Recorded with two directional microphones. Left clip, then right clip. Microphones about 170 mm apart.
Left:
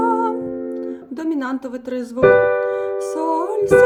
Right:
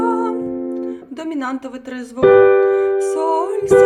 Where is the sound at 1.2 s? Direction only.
30° left (ahead or behind).